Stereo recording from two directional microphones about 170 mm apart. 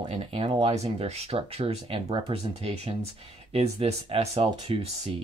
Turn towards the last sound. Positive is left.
turn(degrees=-35)  # may be behind; listen again after turning